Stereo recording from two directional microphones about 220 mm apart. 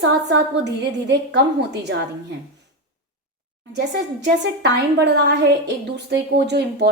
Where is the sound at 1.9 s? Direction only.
55° right (ahead or behind).